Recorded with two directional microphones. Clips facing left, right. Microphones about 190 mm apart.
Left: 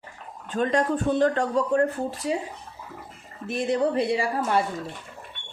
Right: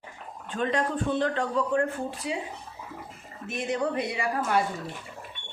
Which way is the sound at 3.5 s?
35° left (ahead or behind).